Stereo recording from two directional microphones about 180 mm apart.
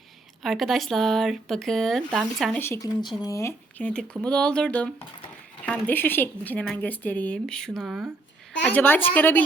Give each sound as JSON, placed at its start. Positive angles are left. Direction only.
{"t": 0.4, "sound": "speech", "side_deg": 0}
{"t": 2.6, "sound": "speech", "side_deg": 15}
{"t": 8.7, "sound": "speech", "side_deg": 10}